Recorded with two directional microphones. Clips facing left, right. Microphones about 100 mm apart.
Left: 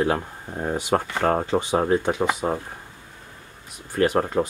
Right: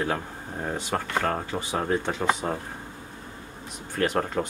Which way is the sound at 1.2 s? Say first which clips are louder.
Left 7 dB; 30° left (ahead or behind).